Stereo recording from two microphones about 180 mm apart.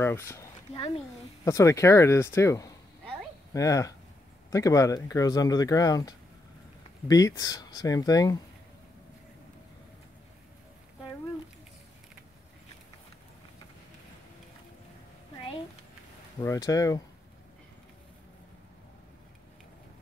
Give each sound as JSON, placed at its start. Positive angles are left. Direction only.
{"t": 0.0, "sound": "speech", "side_deg": 15}
{"t": 16.3, "sound": "speech", "side_deg": 20}